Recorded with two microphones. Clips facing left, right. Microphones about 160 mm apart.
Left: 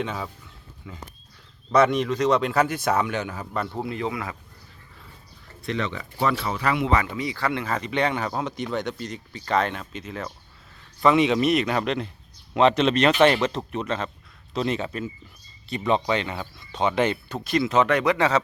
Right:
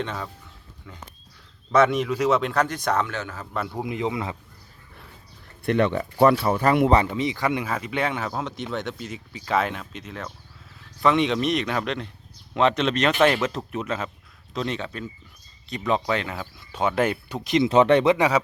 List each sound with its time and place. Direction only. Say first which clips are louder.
0.0 s speech: left 1 dB; 5° left (ahead or behind)
3.5 s speech: even; centre (ahead or behind)
3.8 s speech: right 1 dB; 15° right (ahead or behind)
5.6 s speech: right 7 dB; 55° right (ahead or behind)
7.0 s speech: right 3 dB; 20° right (ahead or behind)
7.7 s speech: left 2 dB; 5° right (ahead or behind)
14.5 s speech: left 3 dB; 5° left (ahead or behind); by 17.7 s 20° right (ahead or behind)
17.7 s speech: right 5 dB; 30° right (ahead or behind); by 18.4 s 10° right (ahead or behind)